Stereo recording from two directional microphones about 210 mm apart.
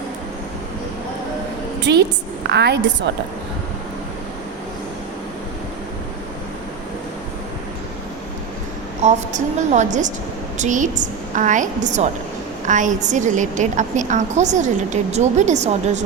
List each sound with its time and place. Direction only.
1.8 s a woman's voice: 55° right (ahead or behind)
9.0 s a woman's voice: 35° right (ahead or behind)